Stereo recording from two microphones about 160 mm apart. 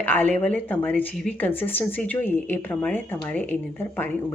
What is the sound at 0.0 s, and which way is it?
A woman's voice, 10° left (ahead or behind).